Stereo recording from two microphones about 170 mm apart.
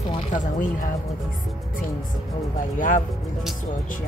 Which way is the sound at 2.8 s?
50° left (ahead or behind).